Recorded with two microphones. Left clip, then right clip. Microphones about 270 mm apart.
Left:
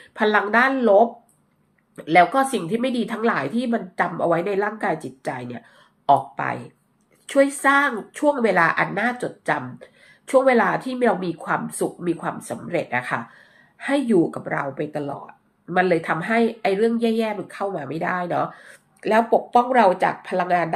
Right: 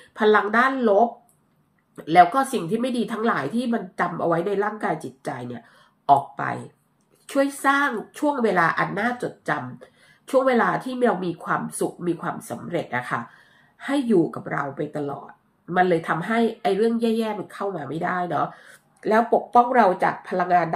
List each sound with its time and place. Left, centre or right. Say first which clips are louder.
0.1 s a woman's voice: even; centre